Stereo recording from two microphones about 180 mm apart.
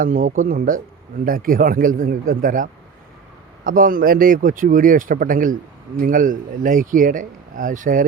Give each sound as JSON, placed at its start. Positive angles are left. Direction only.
{"t": 0.0, "sound": "speech", "side_deg": -50}